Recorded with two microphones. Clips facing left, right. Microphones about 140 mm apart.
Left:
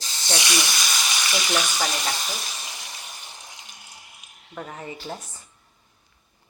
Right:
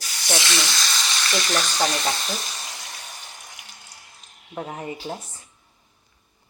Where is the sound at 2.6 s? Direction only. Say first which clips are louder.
Right 1 dB; 20° left (ahead or behind).